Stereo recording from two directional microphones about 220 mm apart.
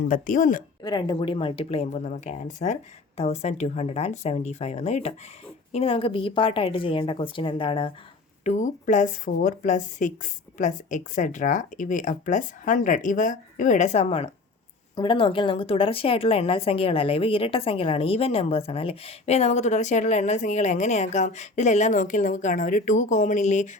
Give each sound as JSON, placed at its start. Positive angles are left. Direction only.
{"t": 0.1, "sound": "speech", "side_deg": 35}
{"t": 0.8, "sound": "a woman's voice", "side_deg": 20}
{"t": 8.4, "sound": "a woman's voice", "side_deg": 35}